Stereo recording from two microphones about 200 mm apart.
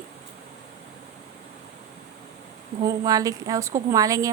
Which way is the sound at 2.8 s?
15° right (ahead or behind).